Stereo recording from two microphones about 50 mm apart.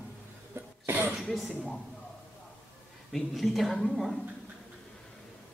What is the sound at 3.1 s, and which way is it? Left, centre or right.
Speech, centre.